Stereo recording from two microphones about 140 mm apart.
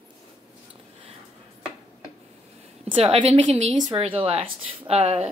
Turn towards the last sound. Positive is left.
turn(degrees=-45)  # may be behind; listen again after turning